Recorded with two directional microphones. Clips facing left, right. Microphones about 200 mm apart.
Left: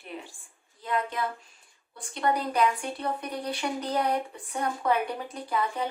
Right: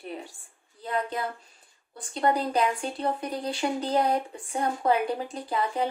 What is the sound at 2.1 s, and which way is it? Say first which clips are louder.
Speech: right 2 dB; 30° right (ahead or behind).